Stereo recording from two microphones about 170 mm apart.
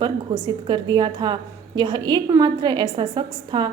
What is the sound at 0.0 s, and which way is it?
A woman's voice, 25° right (ahead or behind).